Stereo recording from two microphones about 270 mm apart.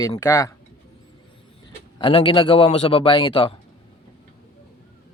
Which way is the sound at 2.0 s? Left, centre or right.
Centre.